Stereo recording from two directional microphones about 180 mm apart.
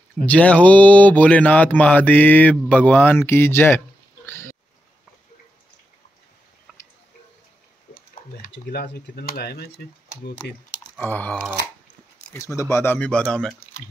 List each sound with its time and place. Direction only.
0.2 s speech: 5° left (ahead or behind)
4.3 s a sound: 15° left (ahead or behind)
6.7 s drip: 5° right (ahead or behind)
8.5 s speech: 70° left (ahead or behind)
11.0 s speech: 10° left (ahead or behind)